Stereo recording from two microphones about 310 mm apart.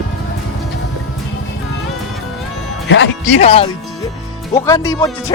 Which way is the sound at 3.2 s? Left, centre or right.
Centre.